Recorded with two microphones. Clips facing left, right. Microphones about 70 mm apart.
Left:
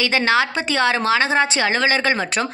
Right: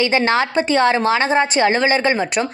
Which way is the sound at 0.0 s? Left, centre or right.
Right.